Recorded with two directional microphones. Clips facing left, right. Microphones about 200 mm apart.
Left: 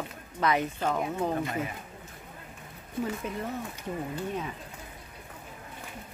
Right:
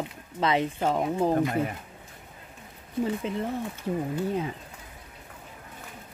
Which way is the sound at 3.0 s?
25° right (ahead or behind).